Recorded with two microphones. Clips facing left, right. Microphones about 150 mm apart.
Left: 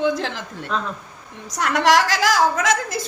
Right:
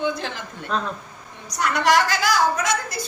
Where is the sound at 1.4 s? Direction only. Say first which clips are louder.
Left 2 dB; 90° left.